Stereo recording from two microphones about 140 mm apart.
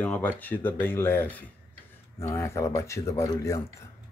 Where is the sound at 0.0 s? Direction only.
10° left (ahead or behind).